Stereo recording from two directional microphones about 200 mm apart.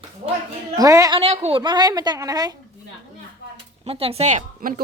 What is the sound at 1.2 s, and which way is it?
A woman's voice, 30° right (ahead or behind).